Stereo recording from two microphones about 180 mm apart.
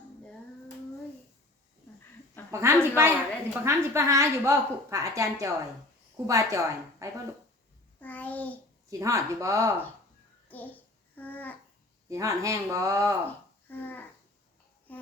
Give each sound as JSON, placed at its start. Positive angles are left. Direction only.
{"t": 2.5, "sound": "a woman's voice", "side_deg": -15}
{"t": 8.0, "sound": "a sound", "side_deg": 10}
{"t": 8.9, "sound": "a woman's voice", "side_deg": -15}
{"t": 10.5, "sound": "a child's voice", "side_deg": 10}
{"t": 11.1, "sound": "babbling", "side_deg": 10}
{"t": 12.0, "sound": "a woman's voice", "side_deg": -15}
{"t": 13.2, "sound": "a sound", "side_deg": 10}